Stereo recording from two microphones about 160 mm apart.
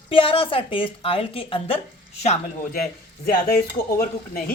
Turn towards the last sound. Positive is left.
turn(degrees=65)  # may be behind; listen again after turning